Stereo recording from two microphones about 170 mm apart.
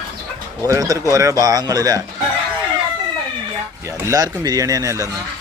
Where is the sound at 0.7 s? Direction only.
20° right (ahead or behind).